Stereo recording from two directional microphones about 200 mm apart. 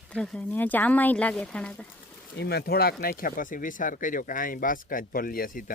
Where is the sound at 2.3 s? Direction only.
55° left (ahead or behind).